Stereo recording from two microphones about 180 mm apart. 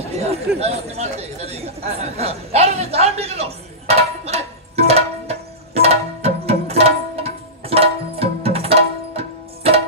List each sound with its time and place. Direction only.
0.1 s a sound: 35° right (ahead or behind)
0.6 s chatter: 35° right (ahead or behind)
6.7 s music: 35° right (ahead or behind)